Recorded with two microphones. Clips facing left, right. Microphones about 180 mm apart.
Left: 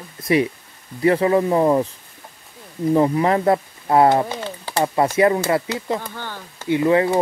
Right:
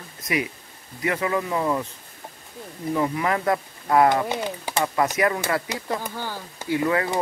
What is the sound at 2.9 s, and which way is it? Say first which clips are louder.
Speech: left 7 dB; 30° left (ahead or behind).